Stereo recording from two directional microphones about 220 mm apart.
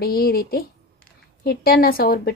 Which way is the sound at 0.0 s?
45° left (ahead or behind).